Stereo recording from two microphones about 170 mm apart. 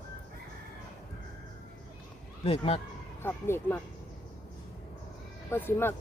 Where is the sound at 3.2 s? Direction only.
15° left (ahead or behind).